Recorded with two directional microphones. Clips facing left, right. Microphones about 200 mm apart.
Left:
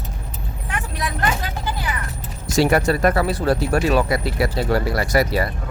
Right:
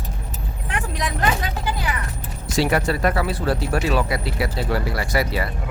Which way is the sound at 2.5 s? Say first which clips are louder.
Left 3 dB; 45° left (ahead or behind).